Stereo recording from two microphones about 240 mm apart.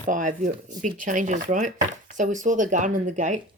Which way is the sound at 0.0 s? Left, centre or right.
Right.